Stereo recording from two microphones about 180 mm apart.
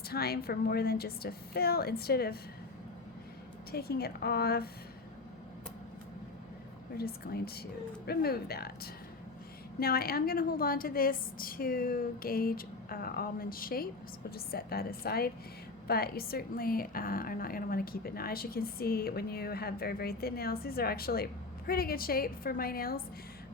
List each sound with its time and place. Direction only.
0.1 s a woman's voice: 60° left (ahead or behind)
3.7 s a woman's voice: 60° left (ahead or behind)
6.9 s a woman's voice: 60° left (ahead or behind)